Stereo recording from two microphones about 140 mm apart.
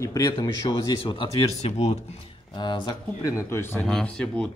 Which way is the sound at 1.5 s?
55° left (ahead or behind).